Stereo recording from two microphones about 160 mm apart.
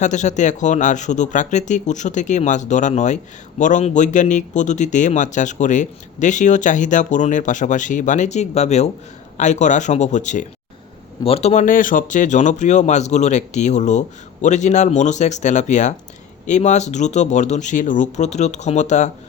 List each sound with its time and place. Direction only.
0.0 s a man's voice: 50° left (ahead or behind)
11.2 s a man's voice: 40° left (ahead or behind)